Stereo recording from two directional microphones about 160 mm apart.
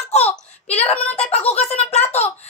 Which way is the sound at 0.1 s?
40° left (ahead or behind).